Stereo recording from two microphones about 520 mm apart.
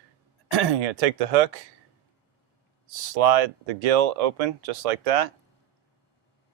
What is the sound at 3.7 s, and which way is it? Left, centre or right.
Speech, right.